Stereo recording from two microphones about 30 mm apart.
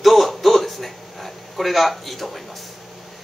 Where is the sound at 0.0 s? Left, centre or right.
Centre.